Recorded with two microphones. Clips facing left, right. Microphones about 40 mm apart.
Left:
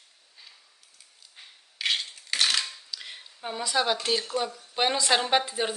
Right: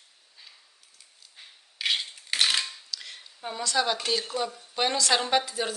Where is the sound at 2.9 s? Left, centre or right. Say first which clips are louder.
Even; centre.